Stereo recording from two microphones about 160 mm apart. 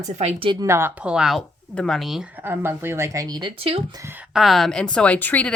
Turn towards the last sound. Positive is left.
turn(degrees=10)  # may be behind; listen again after turning